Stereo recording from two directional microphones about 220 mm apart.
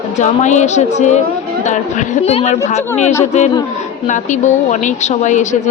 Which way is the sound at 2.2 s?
30° left (ahead or behind).